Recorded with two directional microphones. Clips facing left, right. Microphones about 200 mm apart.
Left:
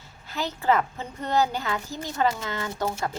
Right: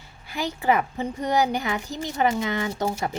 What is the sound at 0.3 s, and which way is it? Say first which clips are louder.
A child's voice: right 1 dB; 10° right (ahead or behind).